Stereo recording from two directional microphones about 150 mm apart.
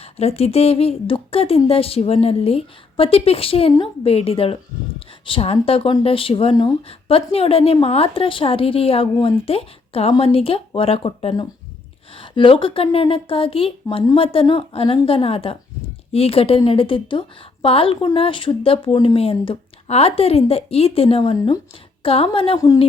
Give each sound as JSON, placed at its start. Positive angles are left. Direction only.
{"t": 0.0, "sound": "speech", "side_deg": 45}
{"t": 22.5, "sound": "a woman's voice", "side_deg": 25}